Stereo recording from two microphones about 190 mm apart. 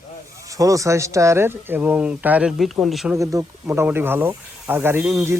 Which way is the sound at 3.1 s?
15° right (ahead or behind).